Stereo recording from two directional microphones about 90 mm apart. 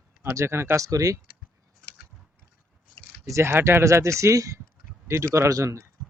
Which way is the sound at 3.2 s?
30° right (ahead or behind).